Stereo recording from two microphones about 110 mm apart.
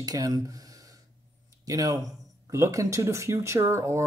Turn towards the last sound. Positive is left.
turn(degrees=-25)  # may be behind; listen again after turning